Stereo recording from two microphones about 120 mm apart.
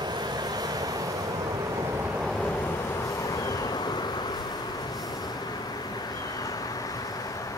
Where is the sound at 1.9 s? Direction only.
10° right (ahead or behind).